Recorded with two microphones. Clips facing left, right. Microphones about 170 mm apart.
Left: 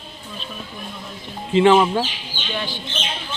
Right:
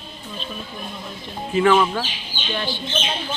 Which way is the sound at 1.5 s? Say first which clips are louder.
Left 3 dB; 25° left (ahead or behind).